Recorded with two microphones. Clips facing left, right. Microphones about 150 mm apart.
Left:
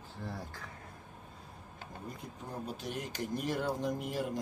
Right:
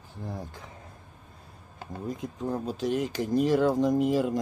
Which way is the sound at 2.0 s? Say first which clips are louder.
Right 14 dB; 90° right.